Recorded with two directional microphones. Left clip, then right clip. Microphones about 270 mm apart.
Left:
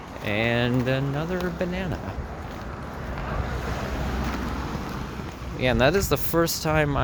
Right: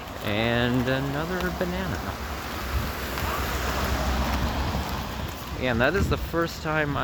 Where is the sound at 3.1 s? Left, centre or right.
Right.